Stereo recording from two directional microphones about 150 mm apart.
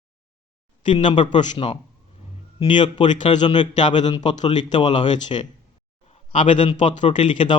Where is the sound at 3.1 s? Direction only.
55° left (ahead or behind).